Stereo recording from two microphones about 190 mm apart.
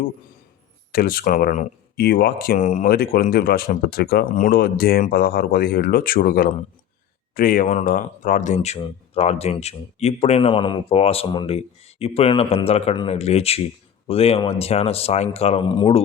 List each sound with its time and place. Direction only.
0.9 s speech: 50° left (ahead or behind); by 16.0 s 25° left (ahead or behind)